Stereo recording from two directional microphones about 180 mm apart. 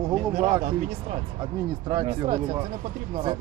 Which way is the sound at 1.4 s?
25° right (ahead or behind).